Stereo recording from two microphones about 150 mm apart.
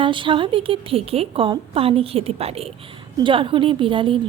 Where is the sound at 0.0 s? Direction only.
35° right (ahead or behind).